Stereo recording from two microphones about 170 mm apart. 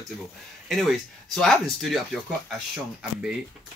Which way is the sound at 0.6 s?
Centre (ahead or behind).